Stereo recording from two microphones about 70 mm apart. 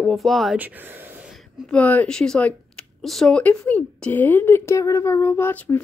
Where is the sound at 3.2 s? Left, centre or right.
Centre.